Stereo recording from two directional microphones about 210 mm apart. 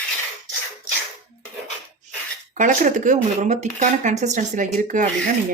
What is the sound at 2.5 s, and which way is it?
Speech, 35° right (ahead or behind).